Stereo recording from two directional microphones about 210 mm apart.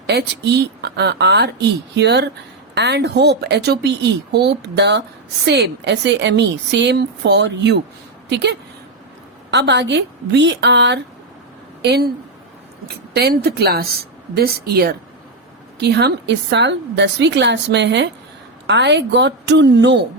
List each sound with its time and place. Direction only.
0.1 s a woman's voice: 50° right (ahead or behind)